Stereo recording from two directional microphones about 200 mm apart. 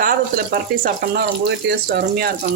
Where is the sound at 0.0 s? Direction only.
45° right (ahead or behind).